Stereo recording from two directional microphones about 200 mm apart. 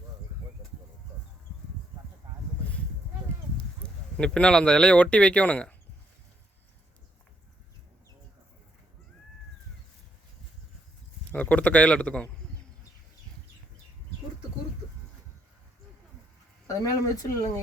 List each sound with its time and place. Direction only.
3.8 s a sound: 5° left (ahead or behind)
4.2 s speech: 5° left (ahead or behind)
11.3 s a man's voice: 5° left (ahead or behind)
16.6 s speech: 15° left (ahead or behind)